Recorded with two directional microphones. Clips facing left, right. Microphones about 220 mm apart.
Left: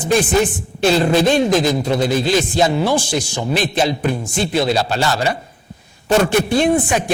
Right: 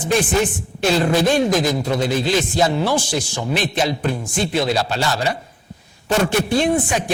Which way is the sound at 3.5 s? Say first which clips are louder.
Left 3 dB; 40° left (ahead or behind).